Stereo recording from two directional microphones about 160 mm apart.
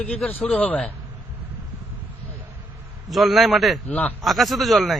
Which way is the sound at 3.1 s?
Centre (ahead or behind).